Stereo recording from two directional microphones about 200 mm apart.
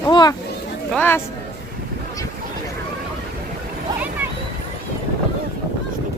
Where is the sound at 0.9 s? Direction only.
10° left (ahead or behind).